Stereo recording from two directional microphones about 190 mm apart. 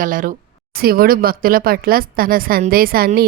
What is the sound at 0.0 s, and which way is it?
A woman's voice, 45° right (ahead or behind).